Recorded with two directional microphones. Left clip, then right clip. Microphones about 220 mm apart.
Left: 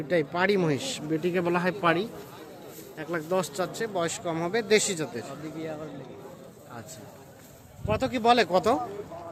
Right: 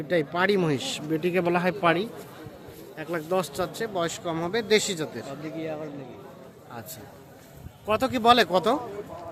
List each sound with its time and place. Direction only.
0.1 s speech: centre (ahead or behind)
5.5 s a man's voice: 25° right (ahead or behind)
7.9 s speech: 15° right (ahead or behind)